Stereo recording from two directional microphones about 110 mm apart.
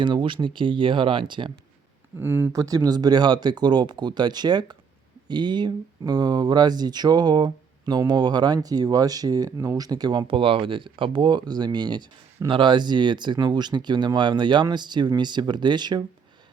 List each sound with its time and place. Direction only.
0.0 s speech: 45° right (ahead or behind)
2.1 s speech: 20° right (ahead or behind)
2.6 s speech: 35° right (ahead or behind)